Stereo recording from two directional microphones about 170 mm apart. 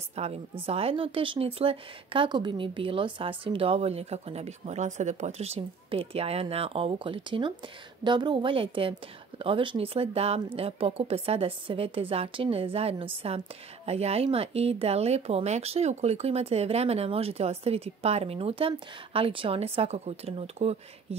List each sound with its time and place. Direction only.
0.1 s a woman's voice: 35° right (ahead or behind)